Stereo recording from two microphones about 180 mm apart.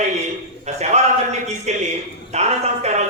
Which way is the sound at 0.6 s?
40° right (ahead or behind).